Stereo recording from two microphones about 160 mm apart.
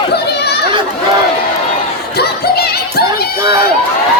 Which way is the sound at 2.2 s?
80° left.